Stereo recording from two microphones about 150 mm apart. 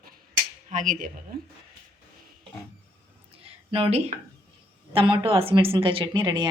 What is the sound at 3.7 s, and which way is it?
A woman's voice, 40° right (ahead or behind).